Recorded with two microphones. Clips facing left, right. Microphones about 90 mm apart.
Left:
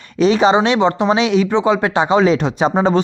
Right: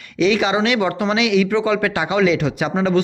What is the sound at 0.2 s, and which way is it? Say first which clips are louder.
Speech: left 4 dB; 35° left (ahead or behind).